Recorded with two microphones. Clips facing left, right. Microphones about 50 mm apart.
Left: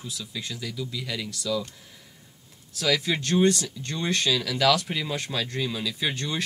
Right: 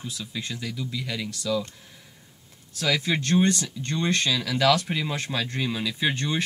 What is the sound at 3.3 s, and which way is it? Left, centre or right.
Speech, right.